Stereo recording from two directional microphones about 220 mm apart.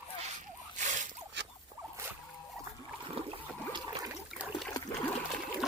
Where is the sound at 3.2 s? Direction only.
25° right (ahead or behind).